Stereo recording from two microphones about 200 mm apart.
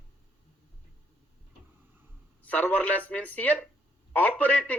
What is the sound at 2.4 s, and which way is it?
Speech, 10° left (ahead or behind).